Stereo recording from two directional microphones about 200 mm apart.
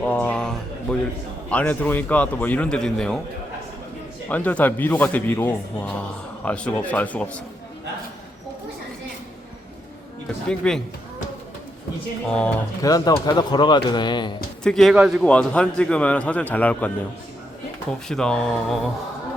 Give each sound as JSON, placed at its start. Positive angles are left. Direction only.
{"t": 0.0, "sound": "a man's voice", "side_deg": 5}
{"t": 4.3, "sound": "a man's voice", "side_deg": 10}
{"t": 10.5, "sound": "speech", "side_deg": 5}
{"t": 12.3, "sound": "speech", "side_deg": 5}
{"t": 12.8, "sound": "speech", "side_deg": 20}
{"t": 14.6, "sound": "a man's voice", "side_deg": 5}
{"t": 18.1, "sound": "speech", "side_deg": 5}